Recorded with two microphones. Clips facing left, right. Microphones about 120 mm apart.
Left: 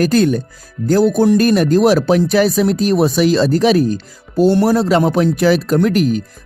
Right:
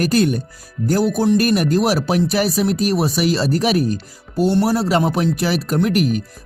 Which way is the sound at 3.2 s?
40° left (ahead or behind).